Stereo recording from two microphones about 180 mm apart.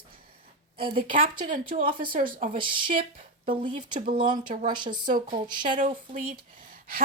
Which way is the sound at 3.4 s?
30° right (ahead or behind).